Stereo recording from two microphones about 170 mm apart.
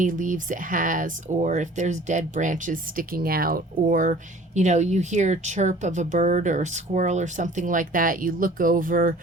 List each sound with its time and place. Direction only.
0.0 s speech: 50° right (ahead or behind)